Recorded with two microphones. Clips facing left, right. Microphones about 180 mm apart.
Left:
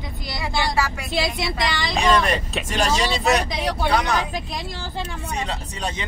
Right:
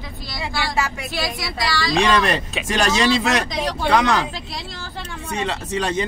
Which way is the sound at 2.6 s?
90° right.